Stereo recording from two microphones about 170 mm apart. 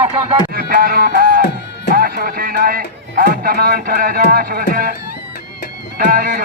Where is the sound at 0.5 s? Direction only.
60° right (ahead or behind).